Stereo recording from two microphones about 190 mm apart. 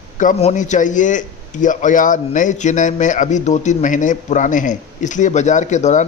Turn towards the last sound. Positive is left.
turn(degrees=40)  # may be behind; listen again after turning